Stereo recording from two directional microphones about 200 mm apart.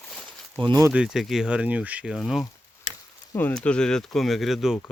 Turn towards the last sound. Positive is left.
turn(degrees=0)  # may be behind; listen again after turning